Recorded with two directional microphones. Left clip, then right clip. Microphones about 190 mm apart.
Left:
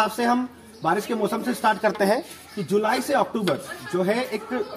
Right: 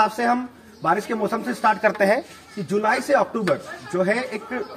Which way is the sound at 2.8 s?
10° right (ahead or behind).